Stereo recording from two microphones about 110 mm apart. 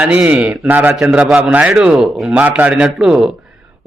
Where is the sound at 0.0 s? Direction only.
5° right (ahead or behind).